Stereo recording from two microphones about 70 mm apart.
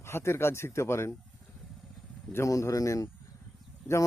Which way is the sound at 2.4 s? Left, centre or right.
Left.